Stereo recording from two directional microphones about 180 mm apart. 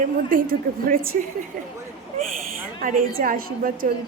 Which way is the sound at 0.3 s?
50° right (ahead or behind).